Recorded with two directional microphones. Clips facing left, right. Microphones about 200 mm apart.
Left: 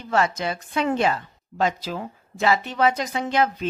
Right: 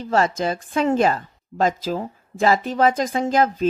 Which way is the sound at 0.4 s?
45° right (ahead or behind).